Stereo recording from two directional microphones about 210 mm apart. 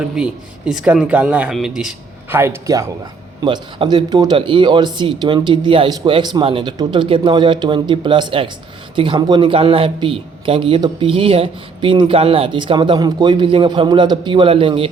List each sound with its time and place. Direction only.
0.2 s speech: 5° right (ahead or behind); by 14.8 s 25° right (ahead or behind)